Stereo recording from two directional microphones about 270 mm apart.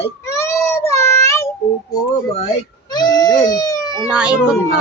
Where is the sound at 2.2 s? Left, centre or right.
Left.